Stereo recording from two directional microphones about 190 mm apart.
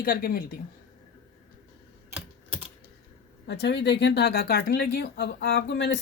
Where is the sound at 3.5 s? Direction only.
60° left (ahead or behind).